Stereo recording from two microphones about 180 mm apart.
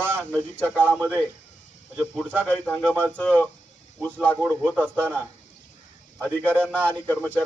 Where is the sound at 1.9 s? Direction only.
10° right (ahead or behind).